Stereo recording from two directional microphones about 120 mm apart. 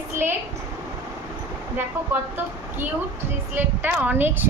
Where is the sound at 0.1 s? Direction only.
20° right (ahead or behind).